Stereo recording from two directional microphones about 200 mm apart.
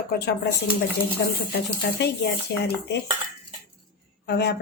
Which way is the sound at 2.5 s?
55° left (ahead or behind).